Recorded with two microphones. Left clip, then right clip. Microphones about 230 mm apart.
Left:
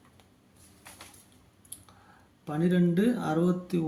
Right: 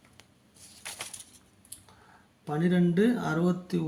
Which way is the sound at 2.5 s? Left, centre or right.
Centre.